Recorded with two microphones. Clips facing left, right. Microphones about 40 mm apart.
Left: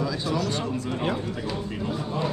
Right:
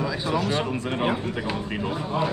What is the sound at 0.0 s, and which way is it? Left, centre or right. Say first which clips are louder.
Speech: right 1 dB; right.